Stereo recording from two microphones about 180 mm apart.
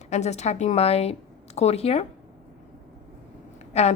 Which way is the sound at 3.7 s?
35° left (ahead or behind).